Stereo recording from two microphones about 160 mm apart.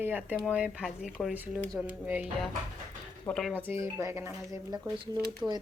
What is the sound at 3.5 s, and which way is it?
Speech, 15° right (ahead or behind).